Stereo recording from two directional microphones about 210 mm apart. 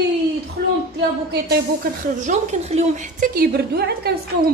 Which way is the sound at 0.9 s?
50° right (ahead or behind).